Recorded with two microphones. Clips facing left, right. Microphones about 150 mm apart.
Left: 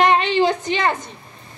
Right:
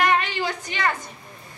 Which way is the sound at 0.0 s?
25° left (ahead or behind).